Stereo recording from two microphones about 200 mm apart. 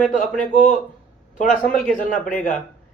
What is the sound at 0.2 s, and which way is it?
Speech, 40° left (ahead or behind).